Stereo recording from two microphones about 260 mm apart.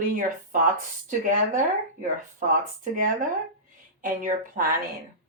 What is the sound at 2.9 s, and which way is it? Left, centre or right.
A woman's voice, right.